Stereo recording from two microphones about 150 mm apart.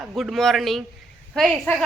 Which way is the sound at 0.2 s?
Centre (ahead or behind).